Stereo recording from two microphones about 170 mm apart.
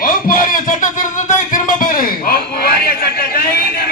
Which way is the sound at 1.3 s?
50° left (ahead or behind).